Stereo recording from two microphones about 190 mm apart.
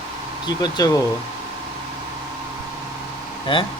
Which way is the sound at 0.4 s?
20° left (ahead or behind).